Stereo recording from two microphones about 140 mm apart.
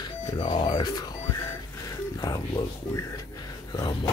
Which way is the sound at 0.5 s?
30° left (ahead or behind).